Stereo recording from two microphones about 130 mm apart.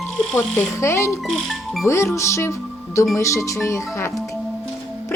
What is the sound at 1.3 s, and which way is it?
Speech, centre (ahead or behind).